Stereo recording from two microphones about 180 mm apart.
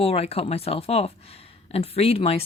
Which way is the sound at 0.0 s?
35° left (ahead or behind).